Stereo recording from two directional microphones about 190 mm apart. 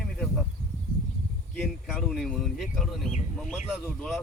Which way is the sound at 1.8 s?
5° right (ahead or behind).